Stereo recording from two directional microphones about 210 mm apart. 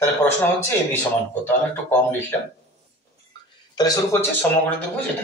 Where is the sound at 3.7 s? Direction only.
20° left (ahead or behind).